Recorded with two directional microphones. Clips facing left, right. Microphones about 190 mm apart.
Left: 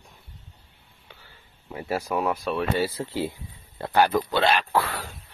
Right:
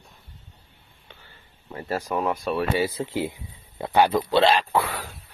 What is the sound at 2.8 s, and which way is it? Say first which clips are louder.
Speech: right 1 dB; 15° right (ahead or behind).